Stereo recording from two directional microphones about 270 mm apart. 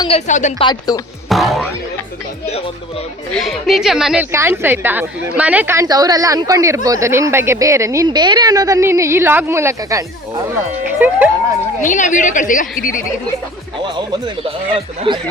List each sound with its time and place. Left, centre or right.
0.0 s a woman's voice: left
1.3 s music: centre
3.3 s speech: centre
11.0 s speech: centre
11.8 s a woman's voice: left
14.4 s speech: centre